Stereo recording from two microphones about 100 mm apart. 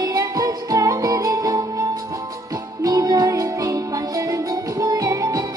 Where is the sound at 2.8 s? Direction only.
35° right (ahead or behind).